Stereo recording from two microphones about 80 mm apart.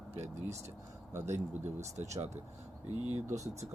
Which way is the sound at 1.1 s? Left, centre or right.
Right.